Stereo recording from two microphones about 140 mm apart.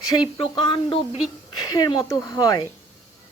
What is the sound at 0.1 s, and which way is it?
Speech, 35° left (ahead or behind).